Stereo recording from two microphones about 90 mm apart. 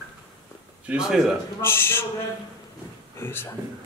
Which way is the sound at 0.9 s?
5° right (ahead or behind).